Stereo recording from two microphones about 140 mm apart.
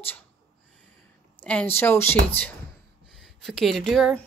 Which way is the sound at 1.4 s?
10° left (ahead or behind).